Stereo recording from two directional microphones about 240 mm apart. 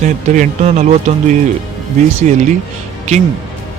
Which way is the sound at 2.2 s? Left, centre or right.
Right.